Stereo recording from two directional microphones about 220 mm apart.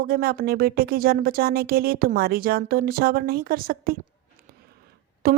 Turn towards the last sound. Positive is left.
turn(degrees=-45)  # may be behind; listen again after turning